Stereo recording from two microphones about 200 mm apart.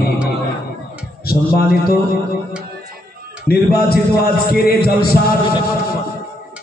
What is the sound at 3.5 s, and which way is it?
A man's voice, 50° left (ahead or behind).